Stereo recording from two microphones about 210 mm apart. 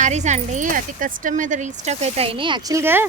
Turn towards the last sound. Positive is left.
turn(degrees=-10)  # may be behind; listen again after turning